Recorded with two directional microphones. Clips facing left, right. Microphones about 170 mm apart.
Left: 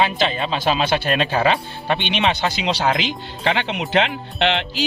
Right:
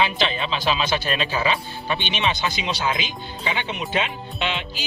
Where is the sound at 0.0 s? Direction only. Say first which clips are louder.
Left 3 dB; 45° left (ahead or behind).